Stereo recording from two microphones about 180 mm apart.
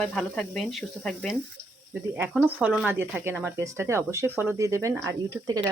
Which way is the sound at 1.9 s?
10° right (ahead or behind).